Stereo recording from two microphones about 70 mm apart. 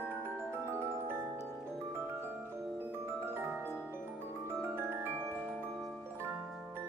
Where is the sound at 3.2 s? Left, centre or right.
Right.